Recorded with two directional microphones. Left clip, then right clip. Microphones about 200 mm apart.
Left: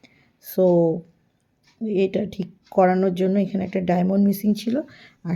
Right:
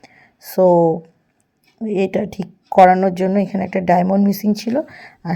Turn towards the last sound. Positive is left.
turn(degrees=-25)  # may be behind; listen again after turning